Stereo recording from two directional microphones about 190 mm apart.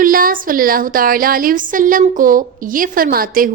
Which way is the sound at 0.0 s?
50° right (ahead or behind).